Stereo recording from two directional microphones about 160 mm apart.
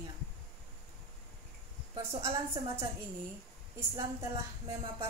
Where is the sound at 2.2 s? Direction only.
20° right (ahead or behind).